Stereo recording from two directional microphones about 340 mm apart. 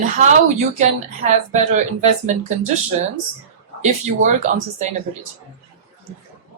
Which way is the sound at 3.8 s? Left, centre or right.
Right.